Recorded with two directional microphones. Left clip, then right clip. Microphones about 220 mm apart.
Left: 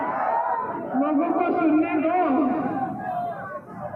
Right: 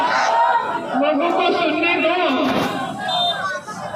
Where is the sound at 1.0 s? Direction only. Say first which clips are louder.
Right 5 dB; 50° right (ahead or behind).